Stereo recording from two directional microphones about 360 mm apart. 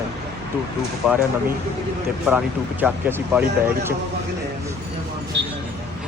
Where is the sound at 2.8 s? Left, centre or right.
Centre.